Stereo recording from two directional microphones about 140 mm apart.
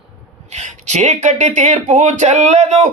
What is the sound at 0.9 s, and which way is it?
Speech, 55° right (ahead or behind).